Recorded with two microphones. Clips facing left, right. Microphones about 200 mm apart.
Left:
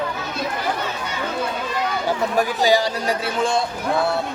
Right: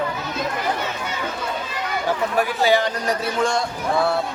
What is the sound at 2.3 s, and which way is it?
Speech, 40° left (ahead or behind).